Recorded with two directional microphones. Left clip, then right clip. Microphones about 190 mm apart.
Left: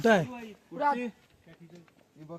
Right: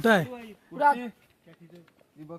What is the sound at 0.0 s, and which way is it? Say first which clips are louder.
Speech: right 2 dB; 25° right (ahead or behind).